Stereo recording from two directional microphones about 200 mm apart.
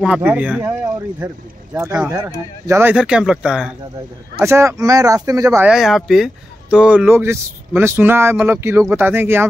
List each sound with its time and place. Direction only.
0.0 s speech: 5° right (ahead or behind)
5.7 s speech: centre (ahead or behind)